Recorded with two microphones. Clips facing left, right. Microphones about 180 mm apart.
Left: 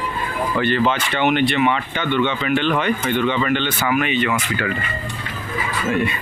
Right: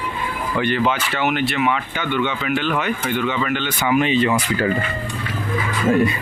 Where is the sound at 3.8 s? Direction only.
25° right (ahead or behind).